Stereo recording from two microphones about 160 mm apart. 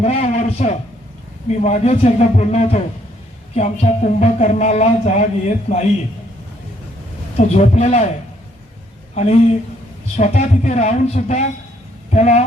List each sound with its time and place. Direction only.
0.0 s a man's voice: 45° left (ahead or behind)
7.3 s speech: 45° left (ahead or behind)
9.1 s speech: 45° left (ahead or behind)